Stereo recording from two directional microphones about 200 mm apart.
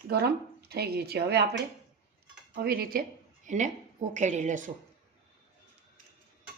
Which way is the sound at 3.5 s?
35° right (ahead or behind).